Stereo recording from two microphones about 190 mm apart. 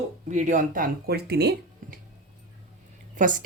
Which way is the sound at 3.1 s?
45° right (ahead or behind).